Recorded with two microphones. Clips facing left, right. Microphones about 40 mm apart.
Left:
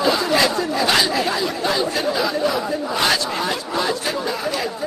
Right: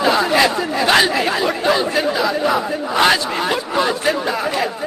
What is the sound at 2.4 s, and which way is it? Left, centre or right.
Battle cry, right.